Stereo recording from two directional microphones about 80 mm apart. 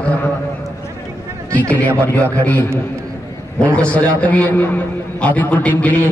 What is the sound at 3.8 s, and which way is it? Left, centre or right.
A man's voice, centre.